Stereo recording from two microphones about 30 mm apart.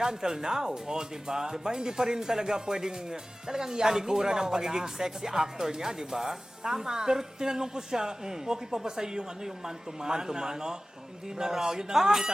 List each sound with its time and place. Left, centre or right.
0.0 s speech: centre